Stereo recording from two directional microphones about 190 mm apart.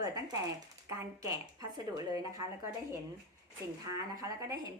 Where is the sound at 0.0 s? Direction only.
20° right (ahead or behind).